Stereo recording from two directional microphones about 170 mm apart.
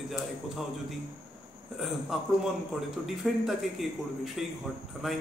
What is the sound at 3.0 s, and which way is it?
A man's voice, centre (ahead or behind).